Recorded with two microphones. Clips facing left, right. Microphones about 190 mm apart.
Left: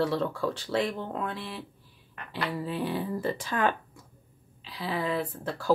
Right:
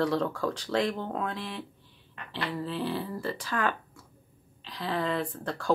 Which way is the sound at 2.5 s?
15° left (ahead or behind).